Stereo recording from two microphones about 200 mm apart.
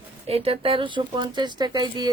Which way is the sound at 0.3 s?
30° right (ahead or behind).